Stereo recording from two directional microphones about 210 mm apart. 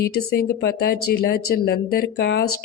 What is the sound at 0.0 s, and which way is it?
Speech, 50° left (ahead or behind).